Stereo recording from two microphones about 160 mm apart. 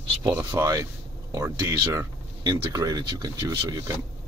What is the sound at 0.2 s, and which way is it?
Speech, 15° right (ahead or behind).